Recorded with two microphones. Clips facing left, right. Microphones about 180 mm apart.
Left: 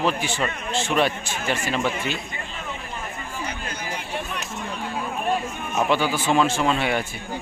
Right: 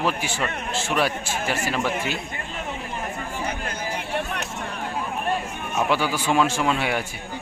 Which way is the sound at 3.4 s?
55° right (ahead or behind).